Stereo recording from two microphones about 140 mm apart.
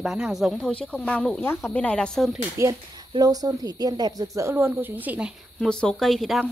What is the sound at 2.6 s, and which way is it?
Speech, 25° right (ahead or behind).